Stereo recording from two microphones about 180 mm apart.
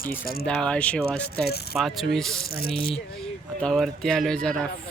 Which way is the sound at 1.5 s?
65° left (ahead or behind).